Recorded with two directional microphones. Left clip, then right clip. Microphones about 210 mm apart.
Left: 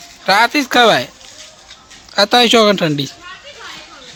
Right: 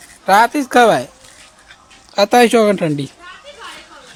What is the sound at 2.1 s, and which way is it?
Speech, 15° right (ahead or behind).